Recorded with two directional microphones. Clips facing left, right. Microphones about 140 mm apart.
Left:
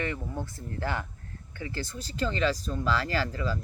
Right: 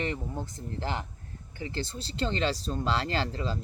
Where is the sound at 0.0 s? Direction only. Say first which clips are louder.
Even; 20° right (ahead or behind).